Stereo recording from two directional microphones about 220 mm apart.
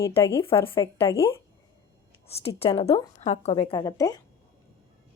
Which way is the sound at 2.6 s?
25° left (ahead or behind).